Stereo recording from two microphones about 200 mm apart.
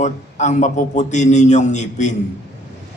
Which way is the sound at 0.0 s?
35° left (ahead or behind).